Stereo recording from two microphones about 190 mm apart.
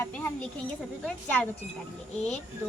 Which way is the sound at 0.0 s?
10° left (ahead or behind).